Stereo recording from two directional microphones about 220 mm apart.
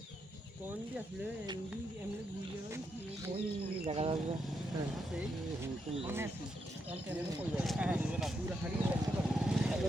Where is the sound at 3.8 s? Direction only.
25° right (ahead or behind).